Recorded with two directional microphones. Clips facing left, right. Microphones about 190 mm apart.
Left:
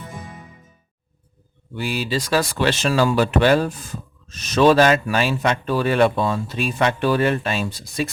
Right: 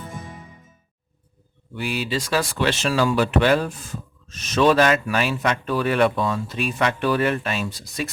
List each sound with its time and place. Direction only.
1.7 s a man's voice: 30° left (ahead or behind)